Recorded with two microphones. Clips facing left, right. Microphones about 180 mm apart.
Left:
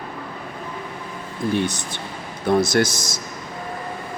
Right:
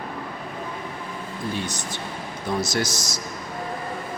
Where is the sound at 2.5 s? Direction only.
55° left (ahead or behind).